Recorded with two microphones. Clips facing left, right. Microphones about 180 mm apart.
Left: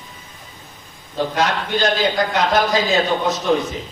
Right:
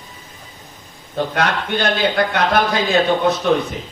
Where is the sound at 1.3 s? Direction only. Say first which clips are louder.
Even; 60° right (ahead or behind).